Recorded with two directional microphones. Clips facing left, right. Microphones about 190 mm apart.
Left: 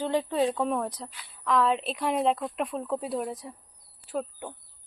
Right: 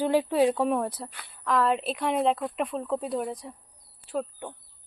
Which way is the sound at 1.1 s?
55° right (ahead or behind).